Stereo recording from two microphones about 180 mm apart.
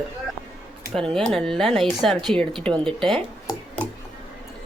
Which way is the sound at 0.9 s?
5° left (ahead or behind).